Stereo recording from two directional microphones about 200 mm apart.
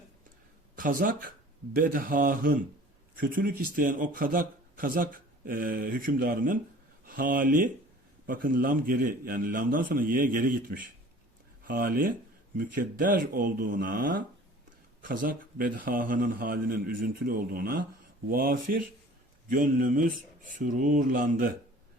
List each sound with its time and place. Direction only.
0.8 s speech: 45° right (ahead or behind)